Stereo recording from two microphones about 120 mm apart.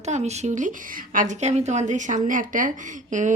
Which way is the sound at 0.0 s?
70° right (ahead or behind).